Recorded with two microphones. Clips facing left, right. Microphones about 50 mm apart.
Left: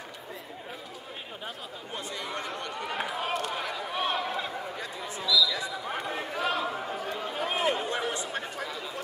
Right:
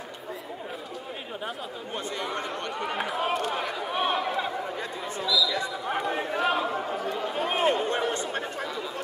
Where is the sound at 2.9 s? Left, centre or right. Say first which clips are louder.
Right 3 dB; centre.